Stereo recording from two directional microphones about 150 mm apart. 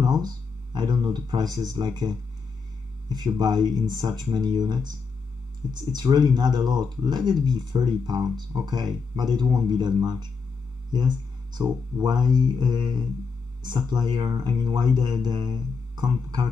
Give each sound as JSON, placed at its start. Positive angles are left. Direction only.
{"t": 0.0, "sound": "a sound", "side_deg": -25}
{"t": 1.0, "sound": "speech", "side_deg": -25}
{"t": 3.3, "sound": "speech", "side_deg": -25}